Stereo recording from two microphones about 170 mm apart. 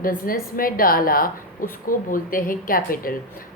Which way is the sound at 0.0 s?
55° left (ahead or behind).